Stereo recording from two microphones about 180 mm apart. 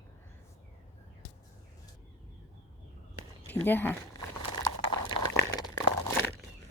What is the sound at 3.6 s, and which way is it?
Speech, 10° left (ahead or behind).